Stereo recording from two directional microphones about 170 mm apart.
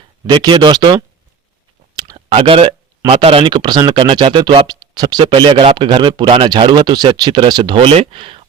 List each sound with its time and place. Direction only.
0.3 s speech: 30° right (ahead or behind)
2.1 s speech: 30° right (ahead or behind)